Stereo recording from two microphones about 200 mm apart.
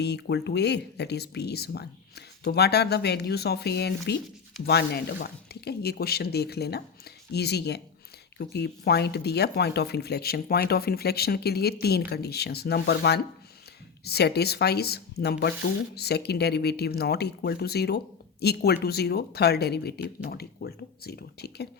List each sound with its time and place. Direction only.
0.0 s speech: 60° left (ahead or behind)